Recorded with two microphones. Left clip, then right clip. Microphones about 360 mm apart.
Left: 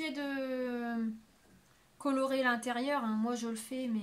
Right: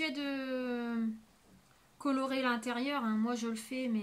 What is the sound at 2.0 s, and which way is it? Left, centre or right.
A woman's voice, centre.